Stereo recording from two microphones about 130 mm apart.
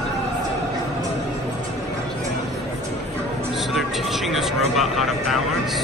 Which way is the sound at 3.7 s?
Centre (ahead or behind).